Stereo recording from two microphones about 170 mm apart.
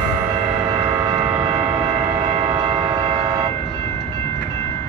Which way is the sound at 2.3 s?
25° right (ahead or behind).